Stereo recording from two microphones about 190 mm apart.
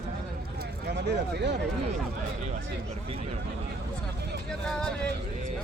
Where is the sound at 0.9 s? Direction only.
65° right (ahead or behind).